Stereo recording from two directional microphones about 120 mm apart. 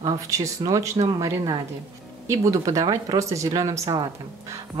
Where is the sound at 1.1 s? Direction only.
25° right (ahead or behind).